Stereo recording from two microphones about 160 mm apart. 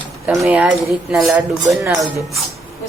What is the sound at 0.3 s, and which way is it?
Speech, 15° right (ahead or behind).